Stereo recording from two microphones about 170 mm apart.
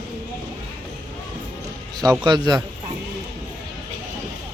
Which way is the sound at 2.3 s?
25° right (ahead or behind).